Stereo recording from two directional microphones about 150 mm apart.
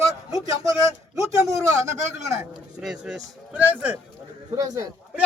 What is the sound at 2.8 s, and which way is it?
A man's voice, 5° right (ahead or behind).